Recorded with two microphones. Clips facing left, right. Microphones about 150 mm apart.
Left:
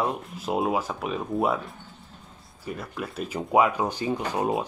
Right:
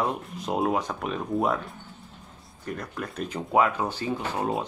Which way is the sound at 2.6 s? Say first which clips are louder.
Even; 5° left (ahead or behind).